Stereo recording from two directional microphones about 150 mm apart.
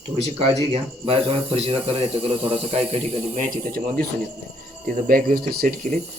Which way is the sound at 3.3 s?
65° right (ahead or behind).